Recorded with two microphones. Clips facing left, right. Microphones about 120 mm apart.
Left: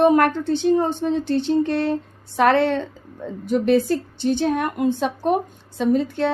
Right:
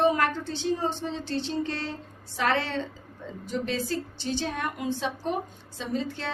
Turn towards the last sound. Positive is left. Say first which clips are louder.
# left 12 dB
turn(degrees=60)  # may be behind; listen again after turning